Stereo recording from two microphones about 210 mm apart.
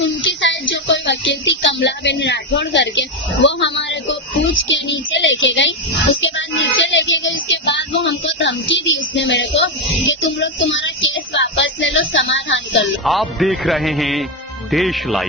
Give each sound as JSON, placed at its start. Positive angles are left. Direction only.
{"t": 0.0, "sound": "speech", "side_deg": 60}
{"t": 4.7, "sound": "child singing", "side_deg": 60}
{"t": 13.1, "sound": "a man's voice", "side_deg": 0}